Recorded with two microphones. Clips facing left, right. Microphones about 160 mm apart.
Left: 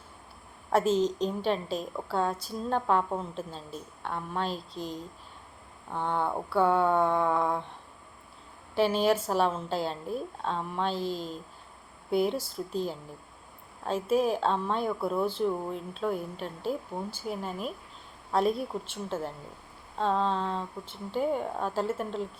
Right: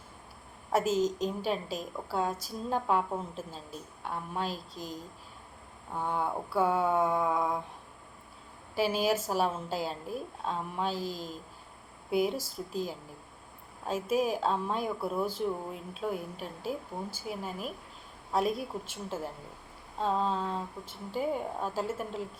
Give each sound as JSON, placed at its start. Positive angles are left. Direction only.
{"t": 0.7, "sound": "speech", "side_deg": -10}
{"t": 4.0, "sound": "speech", "side_deg": -5}
{"t": 8.7, "sound": "a woman's voice", "side_deg": -5}